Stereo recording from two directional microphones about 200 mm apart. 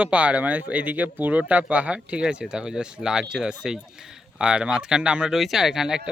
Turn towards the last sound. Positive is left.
turn(degrees=-5)  # may be behind; listen again after turning